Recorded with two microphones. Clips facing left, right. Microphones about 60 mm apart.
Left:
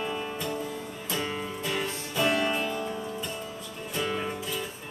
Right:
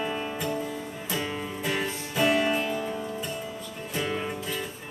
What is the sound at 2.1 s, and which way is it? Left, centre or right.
Music, centre.